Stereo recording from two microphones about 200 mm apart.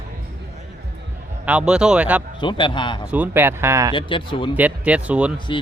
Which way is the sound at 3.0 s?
10° right (ahead or behind).